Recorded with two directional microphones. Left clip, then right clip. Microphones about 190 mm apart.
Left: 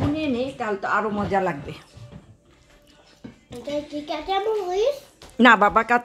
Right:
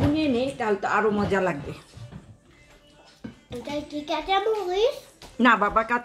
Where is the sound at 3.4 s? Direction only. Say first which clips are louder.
Left 3 dB; 5° left (ahead or behind).